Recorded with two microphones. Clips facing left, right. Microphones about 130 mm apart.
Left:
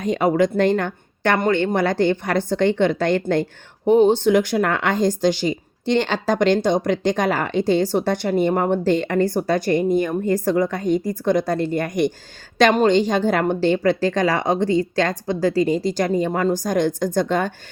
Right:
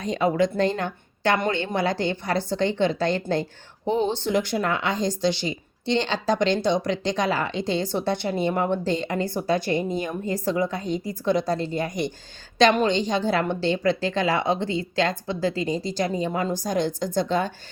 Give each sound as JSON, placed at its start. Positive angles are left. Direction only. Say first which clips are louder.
{"t": 0.5, "sound": "a woman's voice", "louder": "left 5 dB", "side_deg": 65}